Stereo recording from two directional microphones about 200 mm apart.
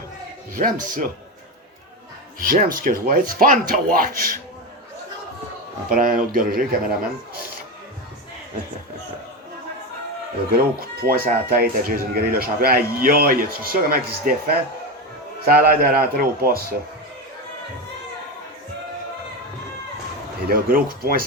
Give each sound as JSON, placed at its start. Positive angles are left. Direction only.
{"t": 0.5, "sound": "speech", "side_deg": -45}
{"t": 2.4, "sound": "speech", "side_deg": -45}
{"t": 5.9, "sound": "speech", "side_deg": -45}
{"t": 10.5, "sound": "speech", "side_deg": -50}
{"t": 20.5, "sound": "speech", "side_deg": -45}